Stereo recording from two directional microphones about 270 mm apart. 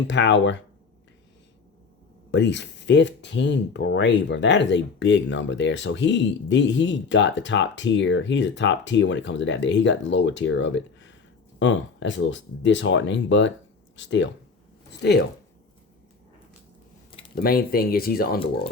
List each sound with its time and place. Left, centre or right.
0.1 s speech: left
2.3 s speech: left
17.3 s speech: left